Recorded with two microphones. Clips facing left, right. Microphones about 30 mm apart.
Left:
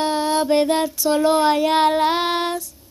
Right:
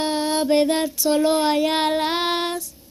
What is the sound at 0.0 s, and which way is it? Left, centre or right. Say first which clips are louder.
Mantra: left 2 dB; centre.